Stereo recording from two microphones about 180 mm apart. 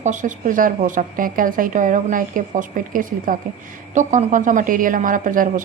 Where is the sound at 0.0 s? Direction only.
45° right (ahead or behind).